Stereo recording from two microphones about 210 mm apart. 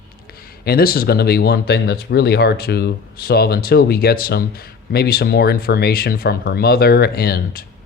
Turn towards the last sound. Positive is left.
turn(degrees=45)  # may be behind; listen again after turning